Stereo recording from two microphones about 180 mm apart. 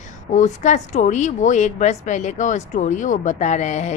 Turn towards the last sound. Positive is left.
turn(degrees=40)  # may be behind; listen again after turning